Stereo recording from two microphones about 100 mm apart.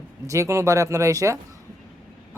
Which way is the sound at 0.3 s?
30° right (ahead or behind).